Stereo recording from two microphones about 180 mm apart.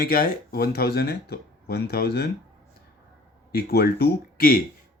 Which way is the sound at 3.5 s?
60° left (ahead or behind).